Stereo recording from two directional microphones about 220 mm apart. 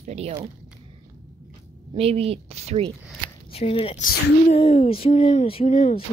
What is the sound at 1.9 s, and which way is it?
Speech, 25° right (ahead or behind).